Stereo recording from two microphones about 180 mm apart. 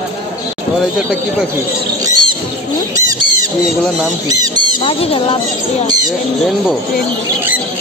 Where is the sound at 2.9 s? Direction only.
20° right (ahead or behind).